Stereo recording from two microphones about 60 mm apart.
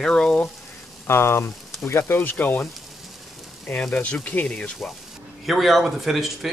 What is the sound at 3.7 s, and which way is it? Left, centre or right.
Speech, centre.